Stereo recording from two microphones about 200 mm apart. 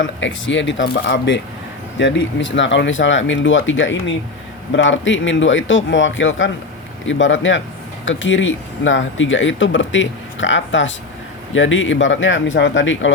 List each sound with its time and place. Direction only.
0.0 s speech: 70° left (ahead or behind)